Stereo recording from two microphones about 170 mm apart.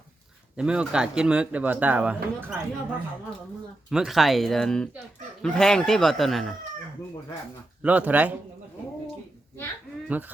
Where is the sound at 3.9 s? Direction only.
Centre (ahead or behind).